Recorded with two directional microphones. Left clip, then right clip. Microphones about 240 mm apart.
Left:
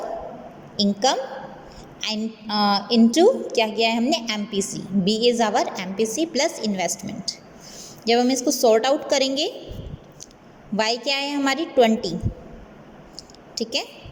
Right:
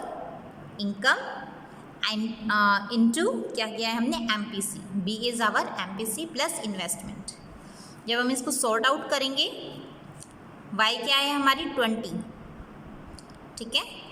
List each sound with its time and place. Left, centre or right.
0.8 s a woman's voice: centre
8.0 s a woman's voice: centre
10.8 s a woman's voice: centre
13.6 s a woman's voice: centre